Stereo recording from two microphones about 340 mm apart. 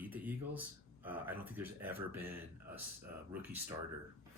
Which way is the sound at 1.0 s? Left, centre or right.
Centre.